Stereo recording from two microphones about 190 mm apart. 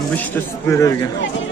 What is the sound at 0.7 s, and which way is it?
Speech, 15° left (ahead or behind).